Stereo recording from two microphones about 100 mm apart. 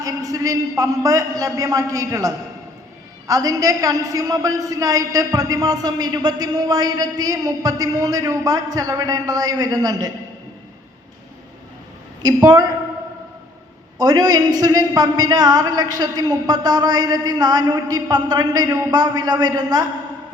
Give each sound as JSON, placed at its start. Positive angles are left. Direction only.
{"t": 0.0, "sound": "a woman's voice", "side_deg": -35}
{"t": 12.2, "sound": "a woman's voice", "side_deg": -40}
{"t": 14.0, "sound": "a woman's voice", "side_deg": -40}